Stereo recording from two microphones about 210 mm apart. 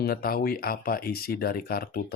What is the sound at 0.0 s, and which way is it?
Speech, 45° left (ahead or behind).